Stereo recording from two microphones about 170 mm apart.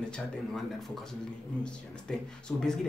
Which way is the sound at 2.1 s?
5° left (ahead or behind).